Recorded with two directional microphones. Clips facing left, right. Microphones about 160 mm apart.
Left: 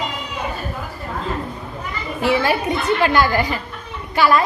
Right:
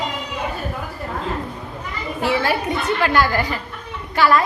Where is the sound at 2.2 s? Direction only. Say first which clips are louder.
Left 2 dB; 20° left (ahead or behind).